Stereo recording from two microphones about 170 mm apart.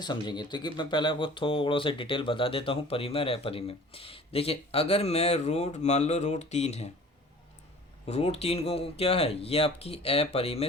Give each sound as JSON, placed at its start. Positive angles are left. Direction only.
{"t": 0.0, "sound": "speech", "side_deg": 25}
{"t": 8.0, "sound": "speech", "side_deg": 35}